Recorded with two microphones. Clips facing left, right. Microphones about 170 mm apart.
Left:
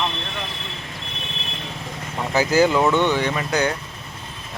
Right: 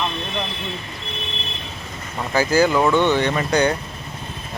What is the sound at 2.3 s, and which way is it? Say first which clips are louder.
Speech: even; 20° left (ahead or behind).